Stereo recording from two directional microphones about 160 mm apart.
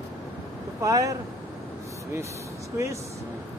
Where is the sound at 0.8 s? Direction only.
20° right (ahead or behind).